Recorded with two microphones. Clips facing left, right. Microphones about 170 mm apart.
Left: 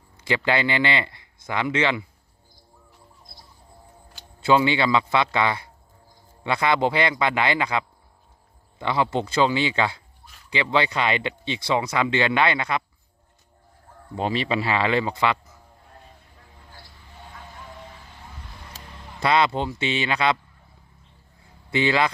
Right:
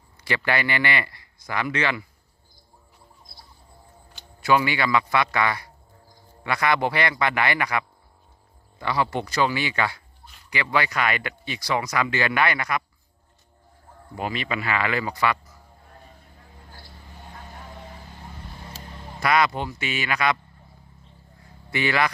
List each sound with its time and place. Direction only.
0.2 s speech: 20° left (ahead or behind)
4.4 s speech: 25° left (ahead or behind)
14.2 s speech: 30° left (ahead or behind)
19.2 s speech: 25° left (ahead or behind)
21.7 s speech: 20° left (ahead or behind)